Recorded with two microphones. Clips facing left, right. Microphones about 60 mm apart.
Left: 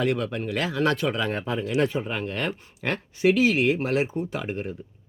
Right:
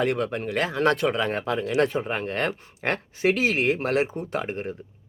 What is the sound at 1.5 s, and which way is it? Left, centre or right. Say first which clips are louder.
Speech: right 2 dB; right.